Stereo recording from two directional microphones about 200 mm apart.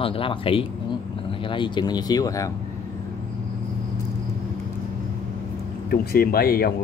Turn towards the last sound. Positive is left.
turn(degrees=50)  # may be behind; listen again after turning